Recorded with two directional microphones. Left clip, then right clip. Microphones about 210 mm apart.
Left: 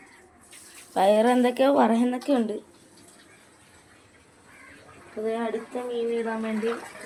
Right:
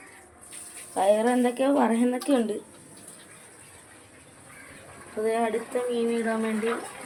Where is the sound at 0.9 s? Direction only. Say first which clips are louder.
Left 2 dB; 55° left (ahead or behind).